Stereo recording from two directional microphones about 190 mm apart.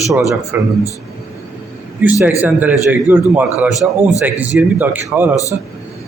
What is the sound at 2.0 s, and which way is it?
A man's voice, 10° right (ahead or behind).